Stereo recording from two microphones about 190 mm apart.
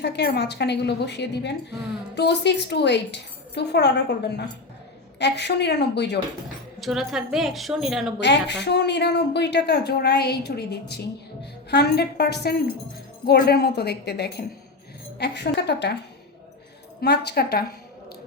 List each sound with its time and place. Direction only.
0.0 s a woman's voice: 60° left (ahead or behind)
6.7 s a woman's voice: centre (ahead or behind)
8.2 s a woman's voice: 65° left (ahead or behind)
17.0 s a woman's voice: 60° left (ahead or behind)